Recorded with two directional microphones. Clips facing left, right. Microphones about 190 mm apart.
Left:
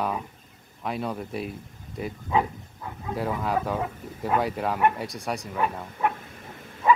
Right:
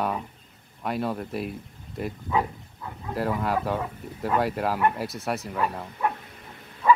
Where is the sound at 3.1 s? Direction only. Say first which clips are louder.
Right 1 dB; centre (ahead or behind).